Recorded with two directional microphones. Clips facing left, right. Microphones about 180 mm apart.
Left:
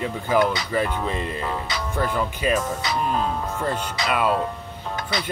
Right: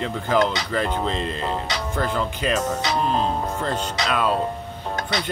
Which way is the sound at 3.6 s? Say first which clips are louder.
Right 1 dB; 10° left (ahead or behind).